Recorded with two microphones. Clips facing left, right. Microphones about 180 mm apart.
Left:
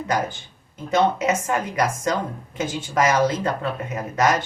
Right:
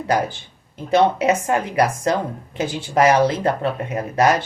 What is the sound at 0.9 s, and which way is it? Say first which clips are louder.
Speech: right 3 dB; 30° right (ahead or behind).